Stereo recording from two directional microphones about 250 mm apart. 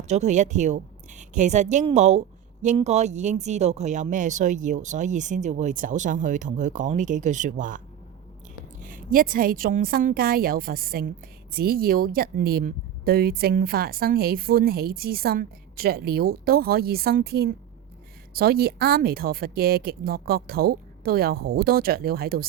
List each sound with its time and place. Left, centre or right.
0.1 s a woman's voice: right
8.8 s speech: right